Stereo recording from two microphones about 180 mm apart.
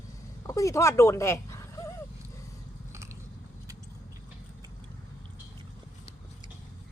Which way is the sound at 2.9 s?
15° right (ahead or behind).